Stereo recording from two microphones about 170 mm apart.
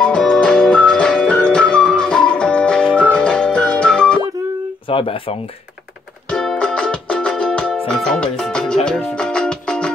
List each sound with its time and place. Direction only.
0.0 s music: 5° left (ahead or behind)
4.8 s speech: 30° left (ahead or behind)
6.3 s music: 5° left (ahead or behind)